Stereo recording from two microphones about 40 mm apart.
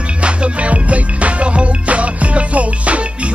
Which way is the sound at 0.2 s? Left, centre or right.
Right.